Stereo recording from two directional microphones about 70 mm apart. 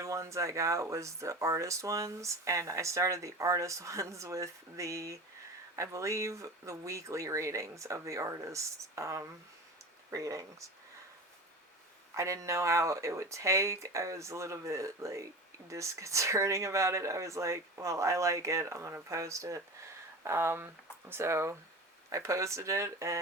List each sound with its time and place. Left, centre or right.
0.0 s speech: right
12.1 s speech: right